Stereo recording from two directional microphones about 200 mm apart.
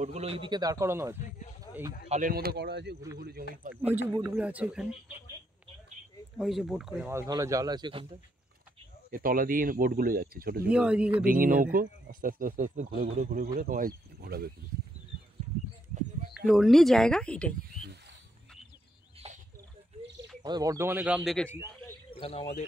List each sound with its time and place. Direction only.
0.0 s a man's voice: 30° right (ahead or behind); by 1.1 s 15° right (ahead or behind)
1.6 s a sound: 15° right (ahead or behind)
2.0 s speech: 40° right (ahead or behind)
4.2 s speech: 5° right (ahead or behind)
6.3 s speech: centre (ahead or behind); by 8.2 s 25° right (ahead or behind)
9.1 s speech: 45° right (ahead or behind)
10.7 s speech: 5° right (ahead or behind)
11.2 s speech: 45° right (ahead or behind)
16.3 s speech: centre (ahead or behind)
19.2 s a sound: 30° right (ahead or behind)
20.4 s speech: 20° right (ahead or behind); by 21.5 s centre (ahead or behind)
22.2 s speech: 30° left (ahead or behind)